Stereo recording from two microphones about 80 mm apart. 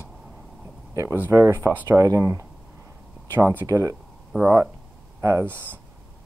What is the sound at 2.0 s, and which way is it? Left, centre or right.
Speech, right.